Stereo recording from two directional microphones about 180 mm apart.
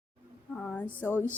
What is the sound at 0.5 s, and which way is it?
Speech, 5° left (ahead or behind).